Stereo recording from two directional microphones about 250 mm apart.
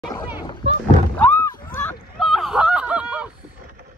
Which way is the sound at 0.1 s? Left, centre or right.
Centre.